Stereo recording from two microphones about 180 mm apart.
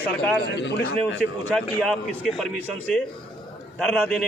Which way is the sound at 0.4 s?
75° left (ahead or behind).